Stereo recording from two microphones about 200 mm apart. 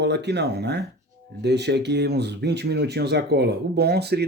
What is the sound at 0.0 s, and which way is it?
Speech, 55° right (ahead or behind).